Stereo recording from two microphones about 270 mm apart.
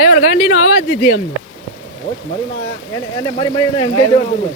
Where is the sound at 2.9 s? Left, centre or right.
Centre.